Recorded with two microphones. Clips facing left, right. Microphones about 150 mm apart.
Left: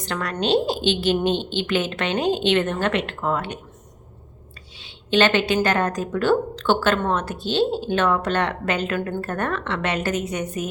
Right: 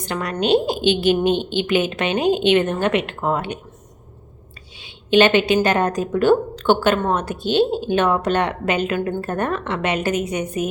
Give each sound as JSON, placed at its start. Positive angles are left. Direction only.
{"t": 0.0, "sound": "a woman's voice", "side_deg": -15}
{"t": 4.8, "sound": "a sound", "side_deg": -15}
{"t": 5.6, "sound": "a woman's voice", "side_deg": -15}